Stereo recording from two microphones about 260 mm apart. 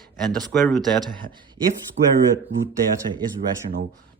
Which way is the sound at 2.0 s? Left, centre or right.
Right.